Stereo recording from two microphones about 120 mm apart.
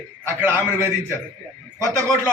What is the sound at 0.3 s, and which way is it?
Speech, 20° right (ahead or behind).